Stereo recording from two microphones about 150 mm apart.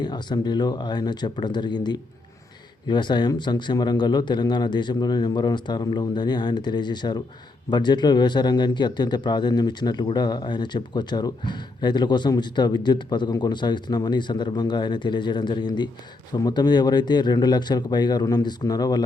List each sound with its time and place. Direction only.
0.0 s a man's voice: 30° left (ahead or behind)